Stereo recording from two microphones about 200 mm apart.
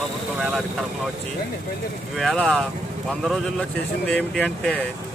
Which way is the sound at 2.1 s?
Centre (ahead or behind).